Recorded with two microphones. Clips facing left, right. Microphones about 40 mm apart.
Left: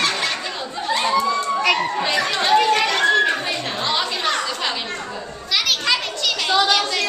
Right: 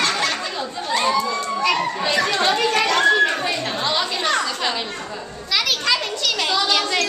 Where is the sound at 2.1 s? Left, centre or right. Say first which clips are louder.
Left 2 dB; centre.